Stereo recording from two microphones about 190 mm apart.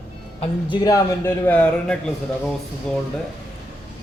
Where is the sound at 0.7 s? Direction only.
20° left (ahead or behind); by 2.5 s 5° left (ahead or behind).